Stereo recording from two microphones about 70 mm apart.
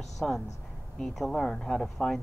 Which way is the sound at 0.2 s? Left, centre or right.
Centre.